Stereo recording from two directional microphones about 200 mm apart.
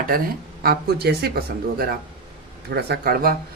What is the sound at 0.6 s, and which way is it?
Speech, 50° right (ahead or behind).